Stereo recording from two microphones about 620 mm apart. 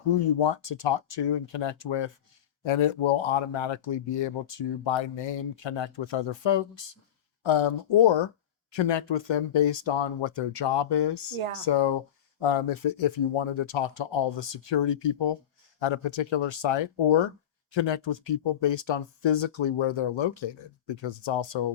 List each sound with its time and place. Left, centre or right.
0.3 s speech: left